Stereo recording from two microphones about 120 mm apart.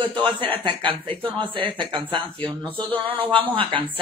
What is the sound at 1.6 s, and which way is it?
Speech, 45° right (ahead or behind).